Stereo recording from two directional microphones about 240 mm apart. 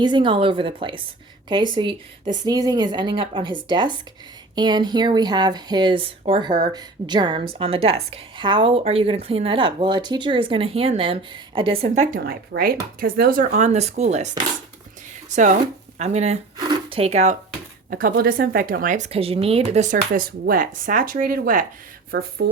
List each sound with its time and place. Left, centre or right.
0.0 s a woman's voice: centre
12.2 s speech: right
15.6 s speech: right
16.6 s zipper: centre
17.9 s speech: right